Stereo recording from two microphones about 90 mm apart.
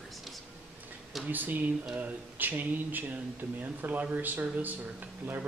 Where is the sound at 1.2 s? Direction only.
20° right (ahead or behind).